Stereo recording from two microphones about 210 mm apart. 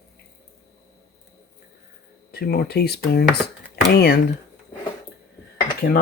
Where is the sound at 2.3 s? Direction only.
50° left (ahead or behind).